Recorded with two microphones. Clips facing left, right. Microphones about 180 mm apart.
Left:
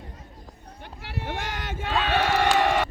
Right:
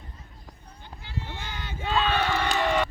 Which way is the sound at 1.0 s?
75° left (ahead or behind).